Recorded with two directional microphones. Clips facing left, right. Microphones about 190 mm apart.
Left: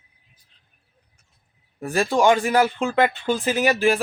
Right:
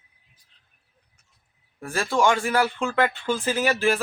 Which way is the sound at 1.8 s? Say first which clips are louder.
Left 4 dB; 15° left (ahead or behind).